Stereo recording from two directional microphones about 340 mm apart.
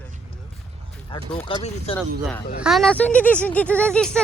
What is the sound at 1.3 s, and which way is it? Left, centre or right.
Speech, centre.